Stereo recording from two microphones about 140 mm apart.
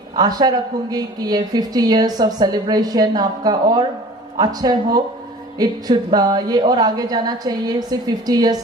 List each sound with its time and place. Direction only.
0.2 s speech: 30° right (ahead or behind)